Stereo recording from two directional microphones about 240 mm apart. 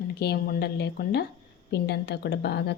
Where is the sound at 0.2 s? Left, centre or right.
Left.